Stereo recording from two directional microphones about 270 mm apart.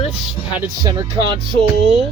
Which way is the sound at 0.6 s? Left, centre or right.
Centre.